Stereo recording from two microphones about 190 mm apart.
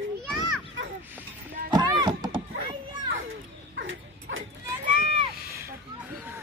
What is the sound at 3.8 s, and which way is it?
Dog, 85° right.